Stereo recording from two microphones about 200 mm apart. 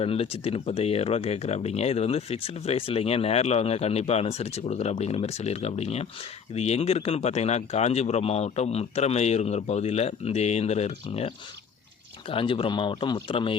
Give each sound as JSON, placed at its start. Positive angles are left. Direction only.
{"t": 0.0, "sound": "speech", "side_deg": 30}
{"t": 12.3, "sound": "speech", "side_deg": 25}